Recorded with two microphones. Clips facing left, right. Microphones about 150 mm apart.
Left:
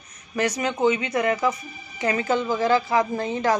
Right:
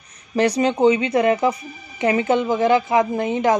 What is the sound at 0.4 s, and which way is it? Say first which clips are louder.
Speech: right 6 dB; 30° right (ahead or behind).